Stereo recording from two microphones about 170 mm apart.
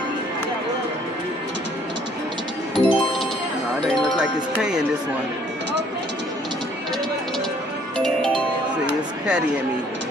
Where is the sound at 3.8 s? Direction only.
Centre (ahead or behind).